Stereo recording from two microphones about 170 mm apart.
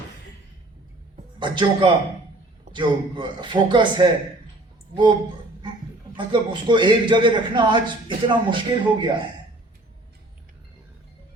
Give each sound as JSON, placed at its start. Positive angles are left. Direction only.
{"t": 1.4, "sound": "a man's voice", "side_deg": -30}
{"t": 6.1, "sound": "a man's voice", "side_deg": -25}